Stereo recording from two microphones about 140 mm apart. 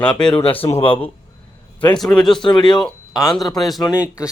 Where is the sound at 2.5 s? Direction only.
35° left (ahead or behind).